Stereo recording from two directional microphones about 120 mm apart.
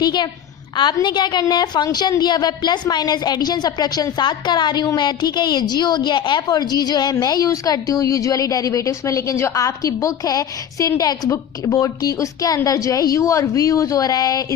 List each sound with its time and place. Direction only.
0.0 s a woman's voice: 35° left (ahead or behind)